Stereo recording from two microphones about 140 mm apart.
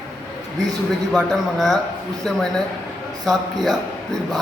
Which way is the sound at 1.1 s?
Centre (ahead or behind).